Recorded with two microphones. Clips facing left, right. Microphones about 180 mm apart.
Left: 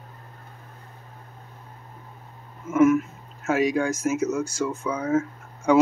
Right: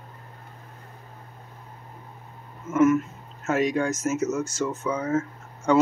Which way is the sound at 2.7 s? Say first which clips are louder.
Left 1 dB; 10° left (ahead or behind).